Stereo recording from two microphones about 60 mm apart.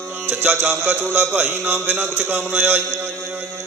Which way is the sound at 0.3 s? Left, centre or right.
Right.